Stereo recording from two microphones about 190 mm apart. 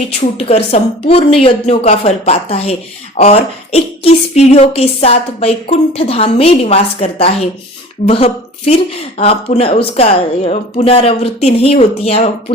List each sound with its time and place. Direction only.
0.3 s speech: 35° left (ahead or behind)